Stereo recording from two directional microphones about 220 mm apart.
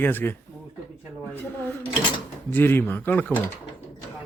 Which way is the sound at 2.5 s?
10° left (ahead or behind).